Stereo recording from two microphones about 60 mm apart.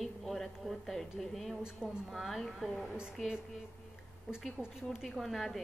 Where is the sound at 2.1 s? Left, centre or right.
Centre.